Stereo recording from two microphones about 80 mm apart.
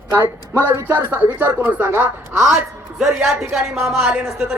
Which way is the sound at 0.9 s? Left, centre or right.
Right.